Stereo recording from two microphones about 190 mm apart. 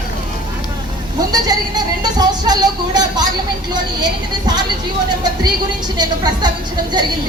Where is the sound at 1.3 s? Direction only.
20° right (ahead or behind).